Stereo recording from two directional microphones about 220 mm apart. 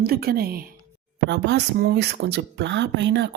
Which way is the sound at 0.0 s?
45° right (ahead or behind).